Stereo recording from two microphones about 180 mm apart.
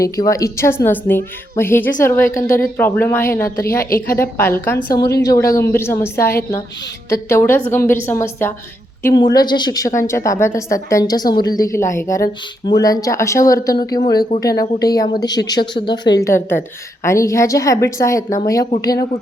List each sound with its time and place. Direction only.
0.0 s a woman's voice: 15° left (ahead or behind)
16.1 s a woman's voice: 15° left (ahead or behind)